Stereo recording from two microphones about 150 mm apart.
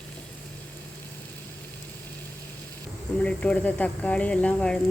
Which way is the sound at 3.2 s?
5° left (ahead or behind).